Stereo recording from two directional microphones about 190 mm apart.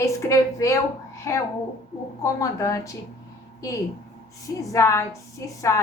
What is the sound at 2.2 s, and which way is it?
Speech, 15° left (ahead or behind).